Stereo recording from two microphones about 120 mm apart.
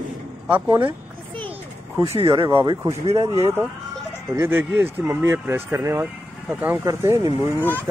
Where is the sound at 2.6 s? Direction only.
35° right (ahead or behind).